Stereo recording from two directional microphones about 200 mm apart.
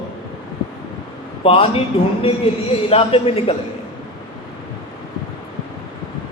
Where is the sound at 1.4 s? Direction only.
30° left (ahead or behind).